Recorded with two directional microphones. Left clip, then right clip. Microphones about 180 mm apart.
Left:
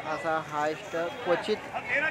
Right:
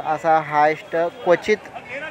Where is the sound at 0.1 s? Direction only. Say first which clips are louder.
Right 13 dB; 20° right (ahead or behind).